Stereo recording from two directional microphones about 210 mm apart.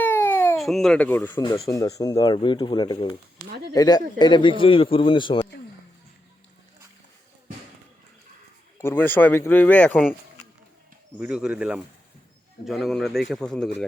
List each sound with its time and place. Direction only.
0.0 s baby cry: 10° left (ahead or behind)
0.6 s speech: centre (ahead or behind)
1.4 s a man's voice: 20° left (ahead or behind)
8.8 s speech: 10° left (ahead or behind)
11.2 s a man's voice: 5° right (ahead or behind)